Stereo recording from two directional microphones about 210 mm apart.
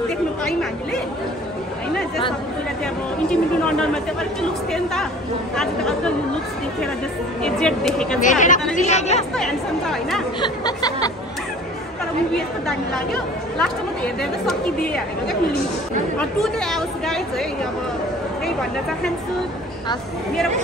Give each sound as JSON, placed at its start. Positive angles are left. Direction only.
{"t": 3.8, "sound": "speech", "side_deg": 5}
{"t": 7.4, "sound": "speech", "side_deg": 5}
{"t": 8.2, "sound": "speech", "side_deg": 35}
{"t": 9.3, "sound": "speech", "side_deg": 0}
{"t": 10.4, "sound": "speech", "side_deg": 20}
{"t": 12.6, "sound": "speech", "side_deg": 5}